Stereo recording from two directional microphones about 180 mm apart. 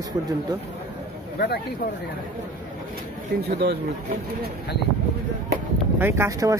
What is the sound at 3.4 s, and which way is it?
Speech, 65° right (ahead or behind).